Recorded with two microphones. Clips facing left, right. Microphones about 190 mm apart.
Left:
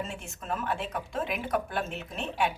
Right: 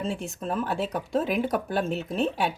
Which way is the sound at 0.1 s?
35° right (ahead or behind).